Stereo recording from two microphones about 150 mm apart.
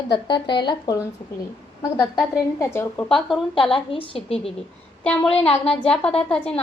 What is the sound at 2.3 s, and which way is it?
Speech, 20° left (ahead or behind).